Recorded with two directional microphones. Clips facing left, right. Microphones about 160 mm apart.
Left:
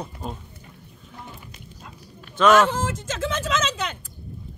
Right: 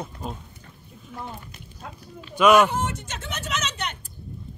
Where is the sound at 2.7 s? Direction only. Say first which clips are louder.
Left 1 dB; 90° left.